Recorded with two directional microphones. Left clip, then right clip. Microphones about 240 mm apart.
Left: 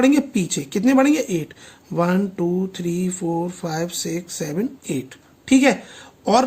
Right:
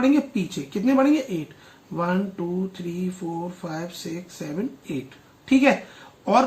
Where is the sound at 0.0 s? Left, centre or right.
Left.